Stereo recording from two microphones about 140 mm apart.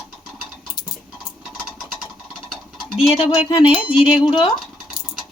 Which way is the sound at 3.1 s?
40° left (ahead or behind).